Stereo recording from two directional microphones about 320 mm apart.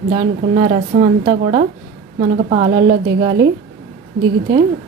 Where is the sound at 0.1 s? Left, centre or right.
Centre.